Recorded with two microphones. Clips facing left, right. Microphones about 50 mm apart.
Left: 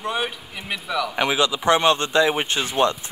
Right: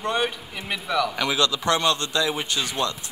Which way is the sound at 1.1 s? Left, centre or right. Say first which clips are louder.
Left 2 dB; left.